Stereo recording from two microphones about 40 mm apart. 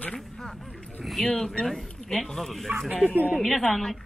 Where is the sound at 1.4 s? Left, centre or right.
Centre.